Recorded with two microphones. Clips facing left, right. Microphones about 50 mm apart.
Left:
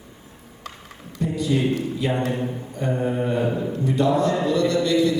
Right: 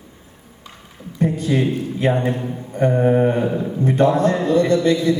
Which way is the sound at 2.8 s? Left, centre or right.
Right.